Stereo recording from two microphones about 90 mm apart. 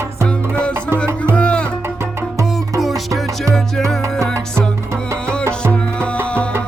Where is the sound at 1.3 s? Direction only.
10° left (ahead or behind).